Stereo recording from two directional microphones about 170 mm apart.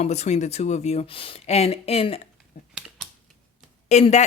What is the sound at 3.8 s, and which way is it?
Speech, 40° left (ahead or behind).